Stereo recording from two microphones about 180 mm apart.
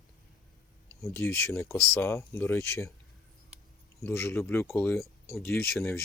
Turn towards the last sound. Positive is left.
turn(degrees=15)  # may be behind; listen again after turning